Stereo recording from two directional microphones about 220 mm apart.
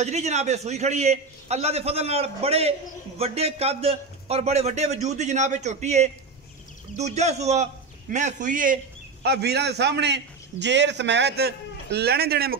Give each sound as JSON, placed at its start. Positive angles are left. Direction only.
{"t": 0.0, "sound": "a man's voice", "side_deg": -30}
{"t": 9.2, "sound": "a man's voice", "side_deg": -45}